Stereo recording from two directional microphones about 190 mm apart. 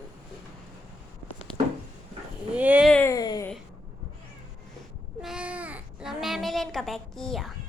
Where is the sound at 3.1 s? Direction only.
20° left (ahead or behind).